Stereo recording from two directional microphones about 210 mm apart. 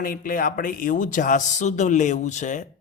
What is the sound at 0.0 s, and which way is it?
Speech, 40° left (ahead or behind).